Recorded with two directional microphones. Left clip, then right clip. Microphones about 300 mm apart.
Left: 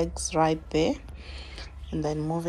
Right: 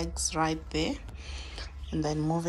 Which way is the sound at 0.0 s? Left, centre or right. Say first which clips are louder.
Left 5 dB; centre.